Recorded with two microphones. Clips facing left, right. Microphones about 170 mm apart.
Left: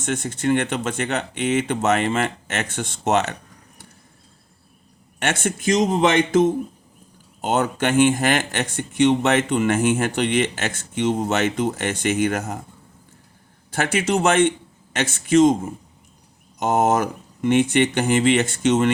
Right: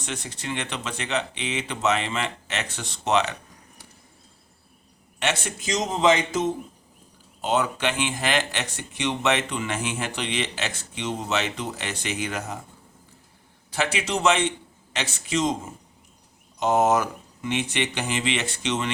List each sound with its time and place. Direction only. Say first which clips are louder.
0.0 s speech: left 10 dB; 50° left (ahead or behind)
5.2 s a man's voice: left 5 dB; 50° left (ahead or behind)
7.4 s speech: left 3 dB; 50° left (ahead or behind)
13.7 s speech: left 5 dB; 50° left (ahead or behind)
16.6 s speech: left 2 dB; 50° left (ahead or behind)